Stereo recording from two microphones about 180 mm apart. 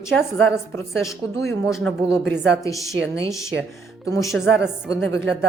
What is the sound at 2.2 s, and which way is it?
Speech, 80° right.